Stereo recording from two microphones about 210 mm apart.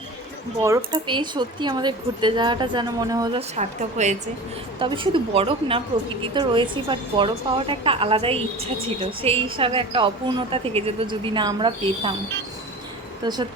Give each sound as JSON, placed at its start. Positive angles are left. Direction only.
{"t": 0.9, "sound": "a woman's voice", "side_deg": -20}
{"t": 3.5, "sound": "a woman's voice", "side_deg": -35}
{"t": 13.2, "sound": "a woman's voice", "side_deg": -20}